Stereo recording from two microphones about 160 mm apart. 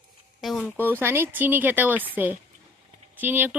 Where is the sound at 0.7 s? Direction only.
10° right (ahead or behind).